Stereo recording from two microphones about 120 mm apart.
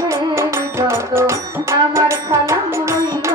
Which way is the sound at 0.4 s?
20° right (ahead or behind).